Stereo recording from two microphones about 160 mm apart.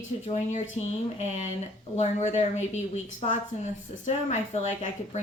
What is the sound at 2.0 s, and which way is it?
Speech, 45° left (ahead or behind).